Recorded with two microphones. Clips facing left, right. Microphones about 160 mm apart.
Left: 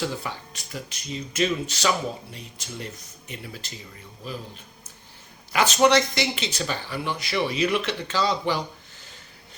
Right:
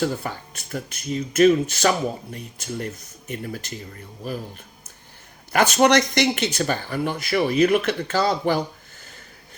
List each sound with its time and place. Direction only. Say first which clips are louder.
0.0 s speech: right 5 dB; 50° right (ahead or behind)
5.5 s speech: right 2 dB; 55° right (ahead or behind)